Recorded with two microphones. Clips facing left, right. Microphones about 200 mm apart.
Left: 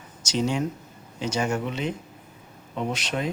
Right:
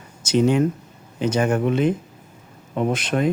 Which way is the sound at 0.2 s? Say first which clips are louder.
Right 8 dB; 55° right (ahead or behind).